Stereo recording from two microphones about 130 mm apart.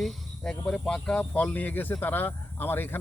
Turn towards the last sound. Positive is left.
turn(degrees=15)  # may be behind; listen again after turning